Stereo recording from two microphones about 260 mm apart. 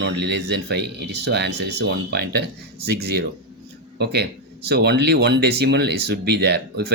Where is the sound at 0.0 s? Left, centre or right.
Right.